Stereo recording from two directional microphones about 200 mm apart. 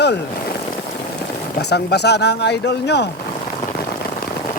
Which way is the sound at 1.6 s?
55° left (ahead or behind).